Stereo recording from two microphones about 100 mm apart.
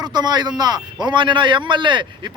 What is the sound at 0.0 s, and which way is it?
Speech, 45° right (ahead or behind).